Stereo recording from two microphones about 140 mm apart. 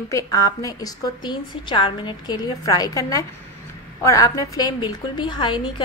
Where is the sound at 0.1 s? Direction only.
25° left (ahead or behind).